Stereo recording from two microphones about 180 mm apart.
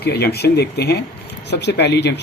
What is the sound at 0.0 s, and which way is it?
Speech, 65° left (ahead or behind).